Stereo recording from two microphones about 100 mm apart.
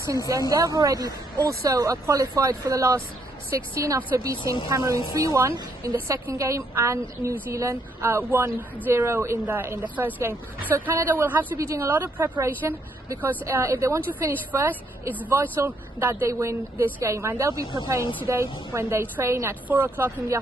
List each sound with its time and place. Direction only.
0.5 s speech: 35° right (ahead or behind)
14.3 s speech: 20° right (ahead or behind)